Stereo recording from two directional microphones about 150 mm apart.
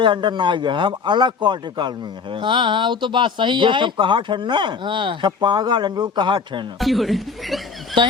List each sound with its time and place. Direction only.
0.0 s speech: 30° right (ahead or behind)
6.7 s speech: centre (ahead or behind)